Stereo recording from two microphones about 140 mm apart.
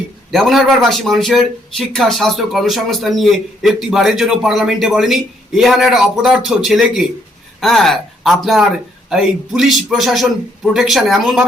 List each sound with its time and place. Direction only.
0.3 s a man's voice: centre (ahead or behind)